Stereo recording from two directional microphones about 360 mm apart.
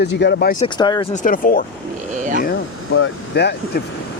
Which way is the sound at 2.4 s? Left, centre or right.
Left.